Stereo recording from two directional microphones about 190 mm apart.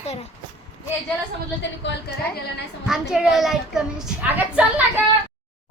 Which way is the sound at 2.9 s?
5° right (ahead or behind).